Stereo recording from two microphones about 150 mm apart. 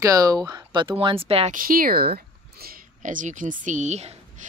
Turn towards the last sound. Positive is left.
turn(degrees=-50)  # may be behind; listen again after turning